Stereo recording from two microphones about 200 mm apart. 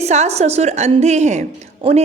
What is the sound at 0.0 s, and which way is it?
A woman's voice, 35° right (ahead or behind).